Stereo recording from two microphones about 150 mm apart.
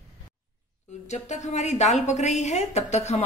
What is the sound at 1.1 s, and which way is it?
A woman's voice, 50° left (ahead or behind).